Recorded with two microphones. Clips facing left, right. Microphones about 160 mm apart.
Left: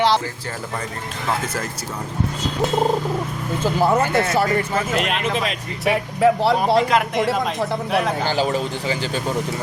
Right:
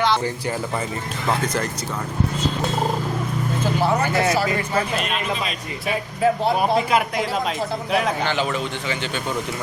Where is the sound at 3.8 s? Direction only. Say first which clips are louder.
Left 3 dB; 50° left (ahead or behind).